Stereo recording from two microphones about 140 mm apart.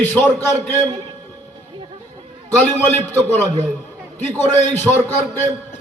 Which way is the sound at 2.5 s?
10° left (ahead or behind).